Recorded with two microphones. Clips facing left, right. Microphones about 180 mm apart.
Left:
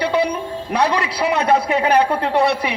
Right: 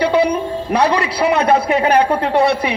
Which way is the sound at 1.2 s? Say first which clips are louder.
Right 3 dB; 55° right (ahead or behind).